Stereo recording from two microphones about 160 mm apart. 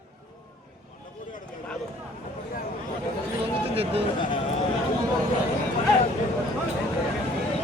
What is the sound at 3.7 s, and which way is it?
Speech, 40° right (ahead or behind).